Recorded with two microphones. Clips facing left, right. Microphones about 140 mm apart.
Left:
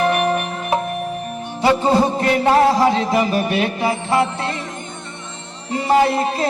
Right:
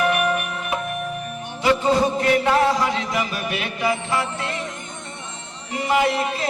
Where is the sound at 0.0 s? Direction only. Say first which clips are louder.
Left 3 dB; 35° left (ahead or behind).